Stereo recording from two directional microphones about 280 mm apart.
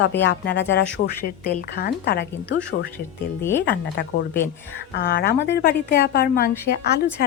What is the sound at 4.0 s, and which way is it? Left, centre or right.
A woman's voice, left.